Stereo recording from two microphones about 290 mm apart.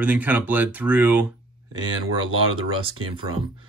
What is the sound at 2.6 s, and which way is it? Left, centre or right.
Speech, centre.